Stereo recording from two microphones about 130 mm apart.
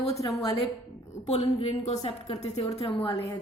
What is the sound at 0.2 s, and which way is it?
Speech, 25° left (ahead or behind).